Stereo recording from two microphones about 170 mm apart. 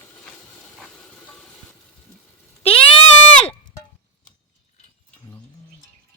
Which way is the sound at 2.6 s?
35° left (ahead or behind).